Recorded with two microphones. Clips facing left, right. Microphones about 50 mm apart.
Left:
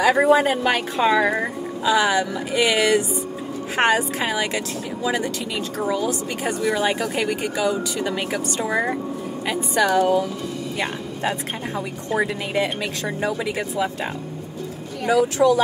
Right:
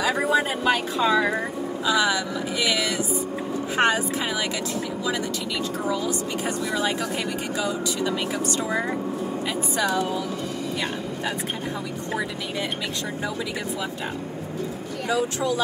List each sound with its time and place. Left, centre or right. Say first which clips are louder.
0.1 s speech: left 6 dB; left
1.0 s speech: left 3 dB; left
6.0 s speech: left 2 dB; left
8.0 s speech: left 1 dB; left
9.5 s speech: left 7 dB; left
15.1 s speech: left 9 dB; left